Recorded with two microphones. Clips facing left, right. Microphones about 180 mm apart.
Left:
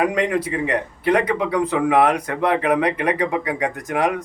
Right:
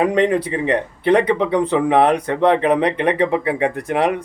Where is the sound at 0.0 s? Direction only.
30° right (ahead or behind).